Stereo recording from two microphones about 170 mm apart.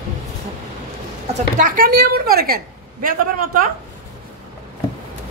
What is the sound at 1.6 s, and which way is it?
A woman's voice, 60° right (ahead or behind).